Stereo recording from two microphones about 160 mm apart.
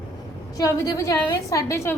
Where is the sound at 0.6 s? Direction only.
20° left (ahead or behind).